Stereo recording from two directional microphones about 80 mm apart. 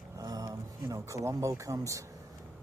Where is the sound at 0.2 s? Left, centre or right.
Right.